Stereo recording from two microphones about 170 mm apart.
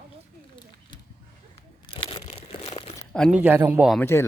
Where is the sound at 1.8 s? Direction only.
30° left (ahead or behind).